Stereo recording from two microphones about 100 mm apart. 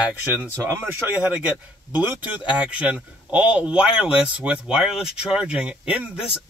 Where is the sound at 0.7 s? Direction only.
20° right (ahead or behind).